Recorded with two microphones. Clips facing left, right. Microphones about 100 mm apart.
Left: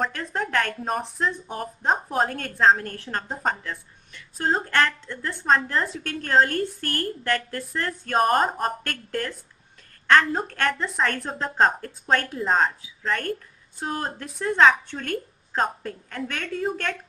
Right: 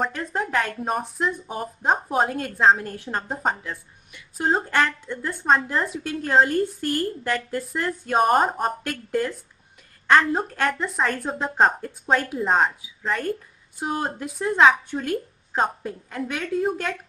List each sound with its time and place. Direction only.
0.0 s a woman's voice: 5° right (ahead or behind)